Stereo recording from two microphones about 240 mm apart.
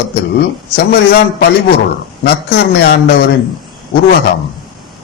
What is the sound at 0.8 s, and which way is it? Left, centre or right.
Speech, left.